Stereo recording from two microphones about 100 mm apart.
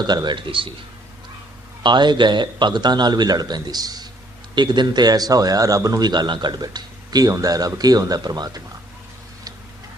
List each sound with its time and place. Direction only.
0.0 s a man's voice: 45° right (ahead or behind)
1.8 s a man's voice: 50° right (ahead or behind)